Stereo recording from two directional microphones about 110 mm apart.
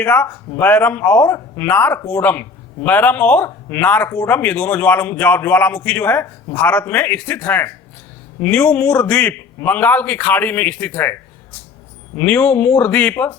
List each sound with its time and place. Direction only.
0.0 s speech: 15° left (ahead or behind)